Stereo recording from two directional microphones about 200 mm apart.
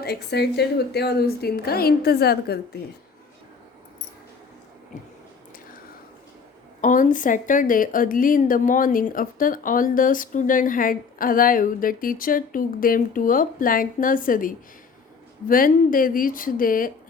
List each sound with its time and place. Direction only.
0.0 s speech: 55° left (ahead or behind)
6.8 s speech: 40° left (ahead or behind)